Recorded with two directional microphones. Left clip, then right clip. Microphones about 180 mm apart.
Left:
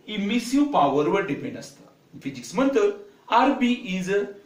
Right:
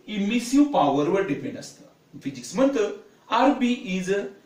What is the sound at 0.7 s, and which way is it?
Speech, 30° left (ahead or behind).